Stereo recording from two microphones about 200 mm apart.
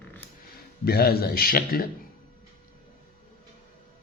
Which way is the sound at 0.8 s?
50° left (ahead or behind).